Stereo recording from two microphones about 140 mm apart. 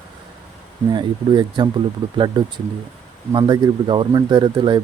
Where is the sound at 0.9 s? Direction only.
35° right (ahead or behind).